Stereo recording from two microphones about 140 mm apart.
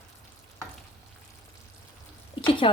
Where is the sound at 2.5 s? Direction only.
35° left (ahead or behind).